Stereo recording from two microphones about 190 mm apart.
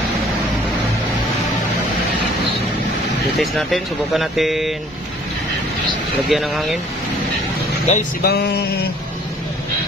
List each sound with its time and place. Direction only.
3.3 s speech: centre (ahead or behind)
6.2 s speech: centre (ahead or behind)
7.9 s speech: 35° left (ahead or behind)
8.2 s a sound: 55° left (ahead or behind)